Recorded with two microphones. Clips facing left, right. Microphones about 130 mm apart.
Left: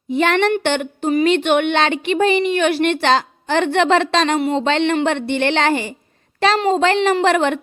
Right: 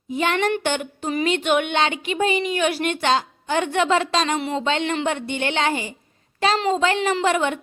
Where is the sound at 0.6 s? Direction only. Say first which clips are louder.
Left 6 dB; 70° left (ahead or behind).